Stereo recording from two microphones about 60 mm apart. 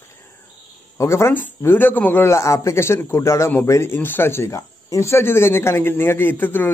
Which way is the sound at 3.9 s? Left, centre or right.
Left.